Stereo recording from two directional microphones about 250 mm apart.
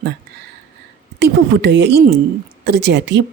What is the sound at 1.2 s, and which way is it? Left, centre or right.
A woman's voice, right.